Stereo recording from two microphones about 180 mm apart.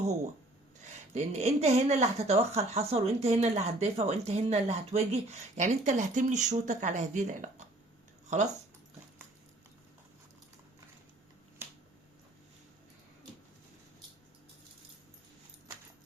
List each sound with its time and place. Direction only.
1.1 s speech: 40° right (ahead or behind)